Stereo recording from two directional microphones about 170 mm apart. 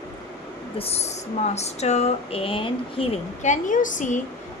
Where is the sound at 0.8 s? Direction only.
40° left (ahead or behind).